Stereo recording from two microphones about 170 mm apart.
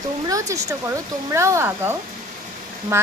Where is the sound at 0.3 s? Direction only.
20° right (ahead or behind).